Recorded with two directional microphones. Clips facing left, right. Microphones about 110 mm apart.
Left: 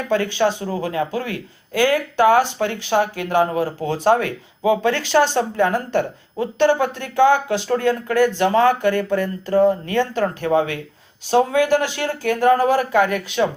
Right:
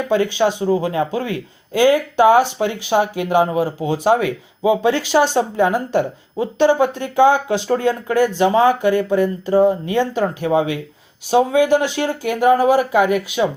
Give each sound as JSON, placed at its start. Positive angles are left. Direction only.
{"t": 0.1, "sound": "a man's voice", "side_deg": -15}